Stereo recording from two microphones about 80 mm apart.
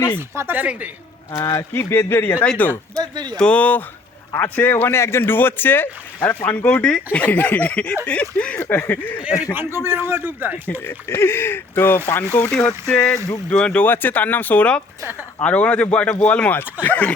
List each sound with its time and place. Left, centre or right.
0.2 s a man's voice: right
1.4 s speech: left
1.7 s speech: left
2.4 s speech: centre
3.0 s speech: right
3.3 s speech: centre
9.5 s a man's voice: right
10.8 s speech: left
12.5 s speech: left
12.9 s speech: centre
13.8 s speech: left